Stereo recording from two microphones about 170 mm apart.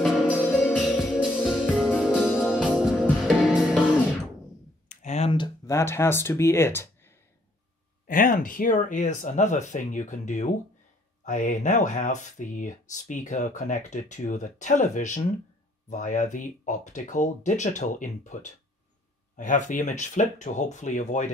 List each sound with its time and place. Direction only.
0.0 s music: centre (ahead or behind)
4.8 s a sound: 40° left (ahead or behind)
5.7 s speech: 15° left (ahead or behind)
8.1 s speech: 55° left (ahead or behind)